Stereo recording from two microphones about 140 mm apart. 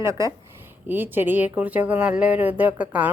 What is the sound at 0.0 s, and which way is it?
Speech, 20° right (ahead or behind).